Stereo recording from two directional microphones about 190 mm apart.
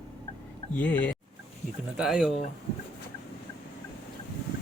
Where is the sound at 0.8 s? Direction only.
10° left (ahead or behind).